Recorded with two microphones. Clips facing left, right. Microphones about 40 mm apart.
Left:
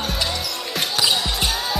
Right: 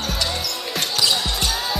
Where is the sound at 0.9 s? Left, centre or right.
Centre.